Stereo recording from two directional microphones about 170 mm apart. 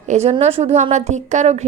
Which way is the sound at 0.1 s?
40° right (ahead or behind).